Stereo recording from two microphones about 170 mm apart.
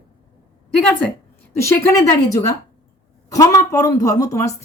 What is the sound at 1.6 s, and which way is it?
A woman's voice, 15° left (ahead or behind).